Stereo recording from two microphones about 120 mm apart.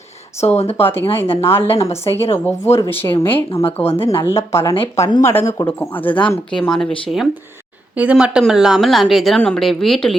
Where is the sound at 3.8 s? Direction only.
50° left (ahead or behind).